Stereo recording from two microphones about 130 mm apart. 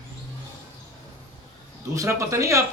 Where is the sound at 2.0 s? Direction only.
25° right (ahead or behind).